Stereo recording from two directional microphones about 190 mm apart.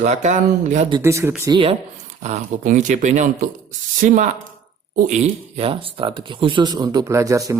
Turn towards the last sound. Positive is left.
turn(degrees=-15)  # may be behind; listen again after turning